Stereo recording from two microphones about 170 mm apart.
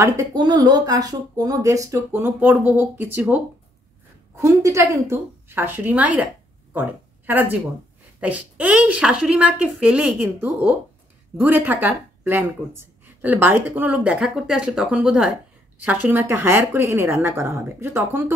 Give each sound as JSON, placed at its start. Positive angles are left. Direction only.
{"t": 0.0, "sound": "speech", "side_deg": -20}
{"t": 7.2, "sound": "speech", "side_deg": -10}